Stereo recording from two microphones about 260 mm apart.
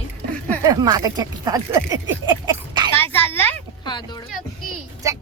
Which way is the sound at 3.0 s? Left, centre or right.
Centre.